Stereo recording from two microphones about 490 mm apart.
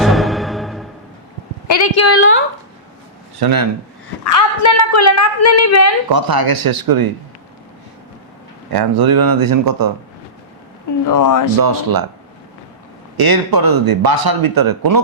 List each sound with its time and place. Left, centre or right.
0.0 s music: centre
1.6 s a woman's voice: left
3.3 s speech: right
4.2 s a woman's voice: left
6.1 s speech: right
8.7 s speech: right
11.0 s a woman's voice: left
11.6 s speech: right
13.1 s speech: right